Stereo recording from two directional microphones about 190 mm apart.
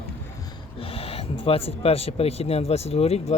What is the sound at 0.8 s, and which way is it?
Speech, 30° left (ahead or behind).